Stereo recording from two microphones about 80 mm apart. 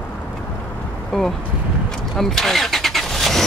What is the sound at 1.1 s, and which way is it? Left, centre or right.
Vehicle, centre.